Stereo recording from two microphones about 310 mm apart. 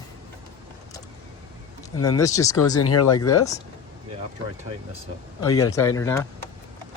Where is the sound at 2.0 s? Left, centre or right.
Centre.